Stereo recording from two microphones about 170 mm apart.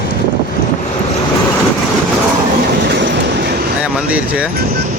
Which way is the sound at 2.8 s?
85° right.